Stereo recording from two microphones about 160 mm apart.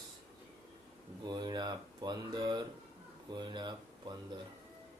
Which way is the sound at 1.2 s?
25° right (ahead or behind).